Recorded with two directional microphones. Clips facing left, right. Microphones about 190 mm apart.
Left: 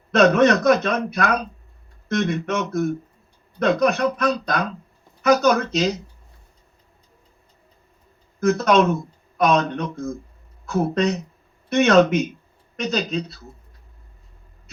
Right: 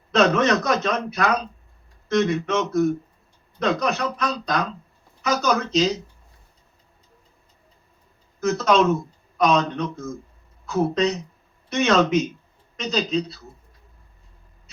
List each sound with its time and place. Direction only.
0.1 s a man's voice: 55° left (ahead or behind)
8.4 s a man's voice: 55° left (ahead or behind)